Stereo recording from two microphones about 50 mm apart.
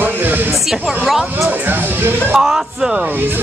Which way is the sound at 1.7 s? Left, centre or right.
Right.